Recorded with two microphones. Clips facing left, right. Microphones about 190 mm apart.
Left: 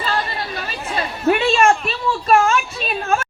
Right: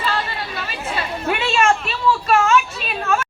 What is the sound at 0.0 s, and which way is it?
Chatter, 40° left (ahead or behind).